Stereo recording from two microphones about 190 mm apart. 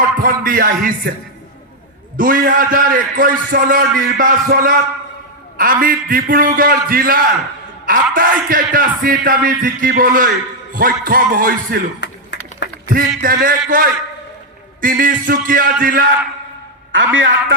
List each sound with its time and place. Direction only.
0.2 s music: 50° right (ahead or behind)
2.1 s a man's voice: 45° right (ahead or behind)
11.9 s a sound: 70° left (ahead or behind)
12.9 s a man's voice: 50° right (ahead or behind)
16.9 s a man's voice: 90° right